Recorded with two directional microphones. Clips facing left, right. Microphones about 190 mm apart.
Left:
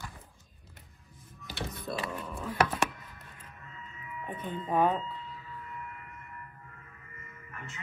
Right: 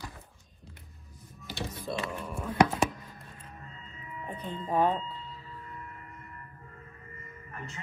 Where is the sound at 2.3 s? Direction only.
10° right (ahead or behind).